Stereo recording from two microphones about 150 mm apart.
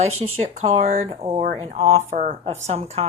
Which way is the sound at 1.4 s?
50° right (ahead or behind).